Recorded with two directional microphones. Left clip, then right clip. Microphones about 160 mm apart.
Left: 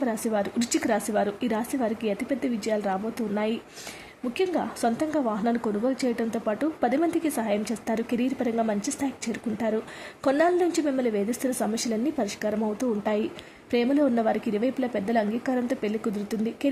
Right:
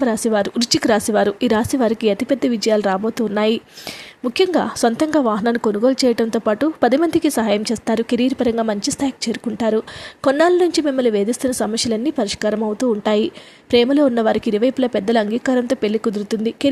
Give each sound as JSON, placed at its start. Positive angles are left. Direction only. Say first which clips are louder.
{"t": 0.0, "sound": "a woman's voice", "louder": "right 9 dB", "side_deg": -40}